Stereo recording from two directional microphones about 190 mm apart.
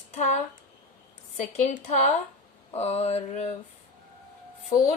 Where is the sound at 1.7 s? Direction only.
40° left (ahead or behind).